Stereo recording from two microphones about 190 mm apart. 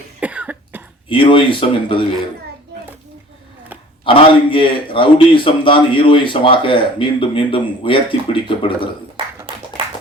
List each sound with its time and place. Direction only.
0.2 s cough: 5° right (ahead or behind)
1.0 s a man's voice: 25° left (ahead or behind)
4.0 s a man's voice: 25° left (ahead or behind)
9.2 s a sound: 25° right (ahead or behind)